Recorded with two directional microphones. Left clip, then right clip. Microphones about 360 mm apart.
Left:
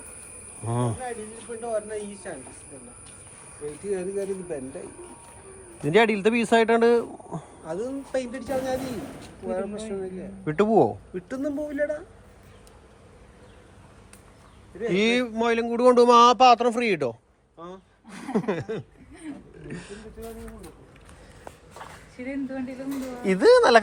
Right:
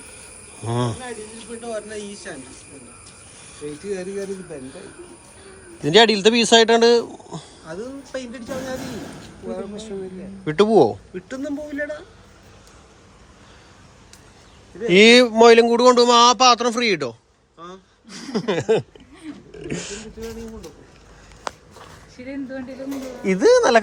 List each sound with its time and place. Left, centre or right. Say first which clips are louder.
0.6 s speech: right 4 dB; centre
1.6 s speech: left 1 dB; left
3.9 s speech: even; left
5.8 s speech: right 6 dB; centre
7.7 s speech: left 2 dB; left
10.4 s speech: right 5 dB; centre
11.1 s speech: right 1 dB; left
14.9 s speech: right 13 dB; centre
17.6 s gasp: right 3 dB; left
18.1 s speech: right 4 dB; centre
23.2 s speech: right 2 dB; centre